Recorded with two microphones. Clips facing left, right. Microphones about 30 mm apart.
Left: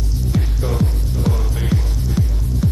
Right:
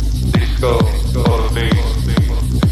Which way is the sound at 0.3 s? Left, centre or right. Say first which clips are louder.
Right 8 dB; right.